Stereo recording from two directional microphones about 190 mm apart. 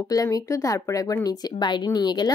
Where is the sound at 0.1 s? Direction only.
20° left (ahead or behind).